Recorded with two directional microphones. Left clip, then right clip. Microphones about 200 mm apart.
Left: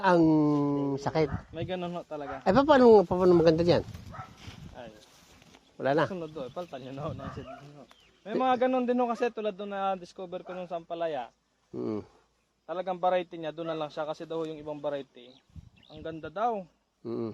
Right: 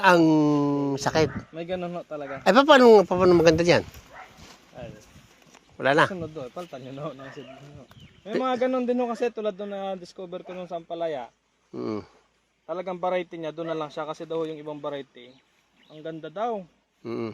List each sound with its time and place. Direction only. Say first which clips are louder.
0.0 s a man's voice: right 5 dB; 5° right (ahead or behind); by 2.2 s 20° right (ahead or behind)
2.4 s speech: right 5 dB; 5° right (ahead or behind)
5.7 s speech: right 6 dB; 5° right (ahead or behind)
6.1 s a man's voice: right 3 dB; 25° right (ahead or behind)
8.4 s a man's voice: right 1 dB; 20° right (ahead or behind)
11.7 s speech: right 3 dB; 5° left (ahead or behind)
12.6 s a man's voice: even; 30° right (ahead or behind)
14.8 s speech: left 1 dB; 50° right (ahead or behind)
16.0 s speech: right 3 dB; 40° right (ahead or behind)
17.0 s speech: right 3 dB; centre (ahead or behind)